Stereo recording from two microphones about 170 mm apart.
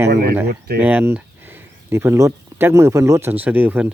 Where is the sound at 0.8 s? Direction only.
10° right (ahead or behind).